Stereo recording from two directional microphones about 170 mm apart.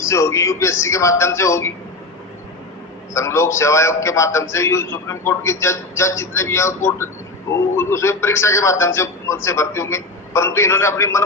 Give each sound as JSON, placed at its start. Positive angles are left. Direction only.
{"t": 0.0, "sound": "a man's voice", "side_deg": 15}
{"t": 3.2, "sound": "a man's voice", "side_deg": 15}